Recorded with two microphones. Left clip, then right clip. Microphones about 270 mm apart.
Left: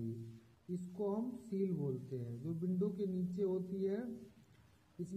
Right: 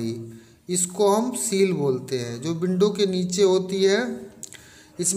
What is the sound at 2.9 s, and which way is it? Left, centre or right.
Speech, centre.